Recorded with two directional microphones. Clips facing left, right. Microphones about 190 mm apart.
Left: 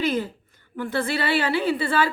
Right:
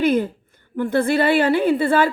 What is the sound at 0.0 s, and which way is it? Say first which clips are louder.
A woman's voice: right 6 dB; 55° right (ahead or behind).